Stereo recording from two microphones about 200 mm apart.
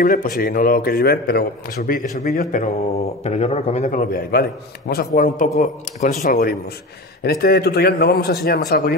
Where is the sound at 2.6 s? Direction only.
30° left (ahead or behind).